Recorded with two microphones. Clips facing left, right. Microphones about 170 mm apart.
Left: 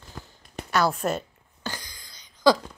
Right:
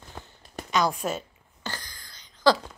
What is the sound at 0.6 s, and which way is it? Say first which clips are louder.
Speech: left 2 dB; 15° right (ahead or behind).